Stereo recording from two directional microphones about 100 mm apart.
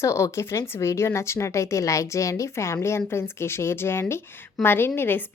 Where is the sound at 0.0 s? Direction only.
30° left (ahead or behind).